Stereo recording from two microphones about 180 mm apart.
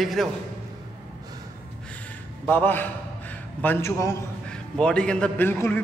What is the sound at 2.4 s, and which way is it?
A man's voice, 10° left (ahead or behind).